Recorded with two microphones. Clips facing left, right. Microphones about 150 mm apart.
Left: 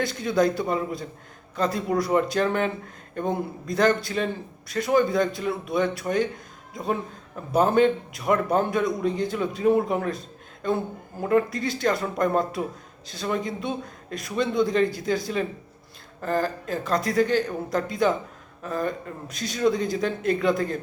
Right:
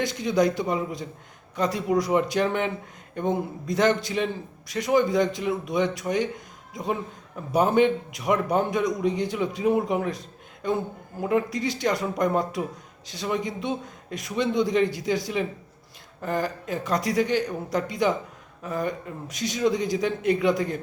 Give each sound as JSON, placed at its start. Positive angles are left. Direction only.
{"t": 0.0, "sound": "a man's voice", "side_deg": -15}